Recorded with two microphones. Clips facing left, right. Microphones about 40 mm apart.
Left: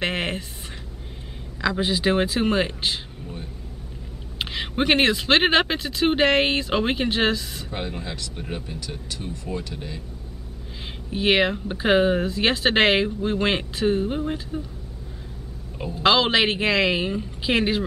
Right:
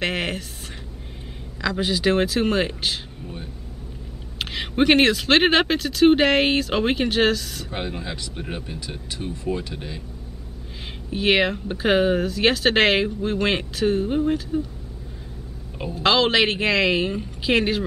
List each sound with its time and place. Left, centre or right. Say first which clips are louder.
0.0 s a sound: right 1 dB; centre
1.6 s speech: even; centre
4.5 s a woman's voice: right 3 dB; centre
7.2 s speech: right 2 dB; centre
7.7 s speech: right 1 dB; centre
11.1 s a woman's voice: even; centre
15.9 s a woman's voice: even; centre